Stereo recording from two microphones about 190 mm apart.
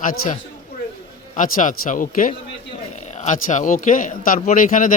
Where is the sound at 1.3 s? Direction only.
45° left (ahead or behind).